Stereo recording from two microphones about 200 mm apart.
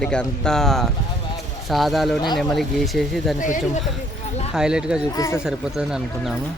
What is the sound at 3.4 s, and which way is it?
Speech, 40° left (ahead or behind).